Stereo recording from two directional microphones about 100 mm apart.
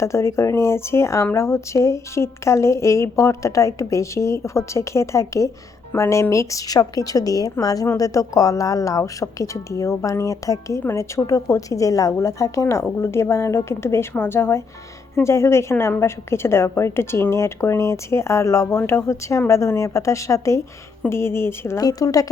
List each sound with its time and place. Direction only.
0.0 s speech: 30° left (ahead or behind)
21.8 s speech: 40° left (ahead or behind)